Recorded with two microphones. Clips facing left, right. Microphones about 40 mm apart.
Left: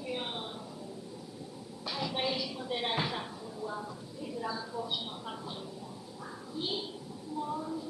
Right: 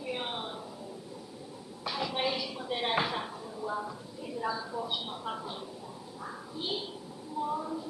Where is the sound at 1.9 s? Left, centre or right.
Centre.